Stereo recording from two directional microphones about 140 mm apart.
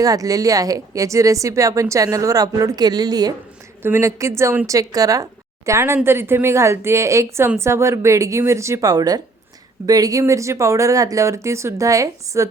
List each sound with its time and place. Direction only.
0.0 s a woman's voice: 25° right (ahead or behind)